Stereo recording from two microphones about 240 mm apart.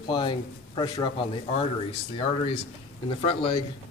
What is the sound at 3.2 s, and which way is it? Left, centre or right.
Speech, left.